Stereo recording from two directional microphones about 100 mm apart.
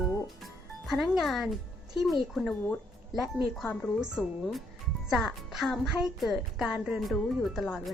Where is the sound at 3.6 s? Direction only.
15° left (ahead or behind).